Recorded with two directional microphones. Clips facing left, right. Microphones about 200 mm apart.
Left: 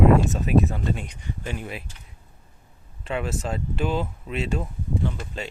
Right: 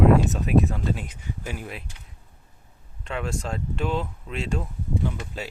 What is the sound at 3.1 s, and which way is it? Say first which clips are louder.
Speech: left 2 dB; 5° left (ahead or behind).